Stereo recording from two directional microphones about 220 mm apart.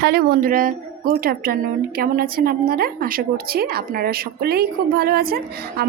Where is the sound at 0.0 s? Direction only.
45° right (ahead or behind).